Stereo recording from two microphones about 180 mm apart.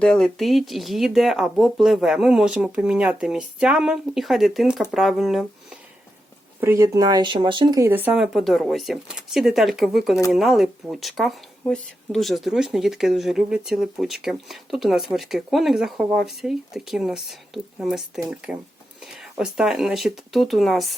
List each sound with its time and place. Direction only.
0.0 s speech: 5° left (ahead or behind)
6.6 s speech: 15° right (ahead or behind)
7.9 s speech: 10° right (ahead or behind)